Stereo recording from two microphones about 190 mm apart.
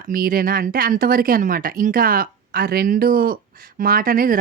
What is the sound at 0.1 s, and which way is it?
Speech, 50° right (ahead or behind).